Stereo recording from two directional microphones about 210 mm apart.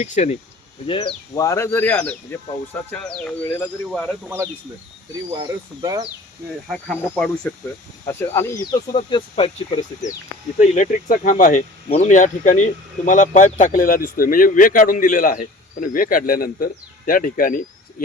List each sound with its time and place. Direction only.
0.0 s speech: 35° left (ahead or behind); by 4.1 s 5° left (ahead or behind)
5.4 s speech: 20° right (ahead or behind)
6.7 s speech: 5° left (ahead or behind); by 10.2 s 25° left (ahead or behind)
10.6 s speech: 40° left (ahead or behind)